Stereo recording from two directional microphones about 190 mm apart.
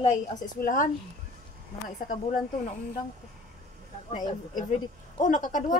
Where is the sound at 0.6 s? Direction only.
45° left (ahead or behind).